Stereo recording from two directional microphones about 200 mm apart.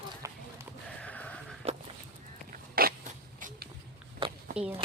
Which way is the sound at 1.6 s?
30° right (ahead or behind).